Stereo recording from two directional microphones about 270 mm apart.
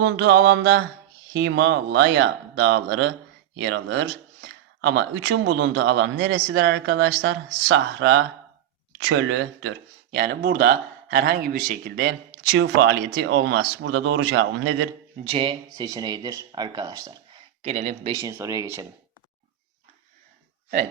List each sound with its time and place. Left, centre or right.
0.0 s speech: right
15.3 s speech: centre
18.2 s speech: centre